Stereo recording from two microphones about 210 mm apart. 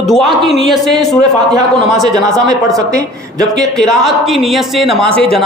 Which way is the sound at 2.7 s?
15° right (ahead or behind).